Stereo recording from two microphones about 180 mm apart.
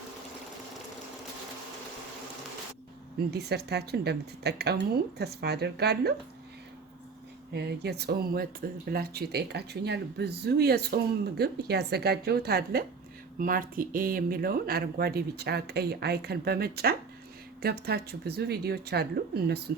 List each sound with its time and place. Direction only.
3.3 s speech: 65° right (ahead or behind)
7.5 s speech: 65° right (ahead or behind)